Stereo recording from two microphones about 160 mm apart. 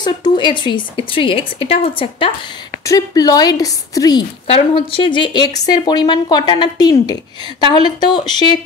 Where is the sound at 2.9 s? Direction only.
25° left (ahead or behind).